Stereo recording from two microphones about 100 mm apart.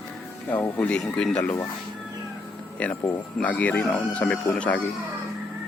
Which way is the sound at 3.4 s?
15° left (ahead or behind).